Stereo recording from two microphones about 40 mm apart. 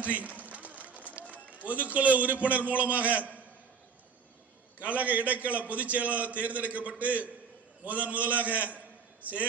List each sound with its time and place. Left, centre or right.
0.0 s a man's voice: right
0.4 s run: right
3.0 s a man's voice: right
4.7 s a man's voice: right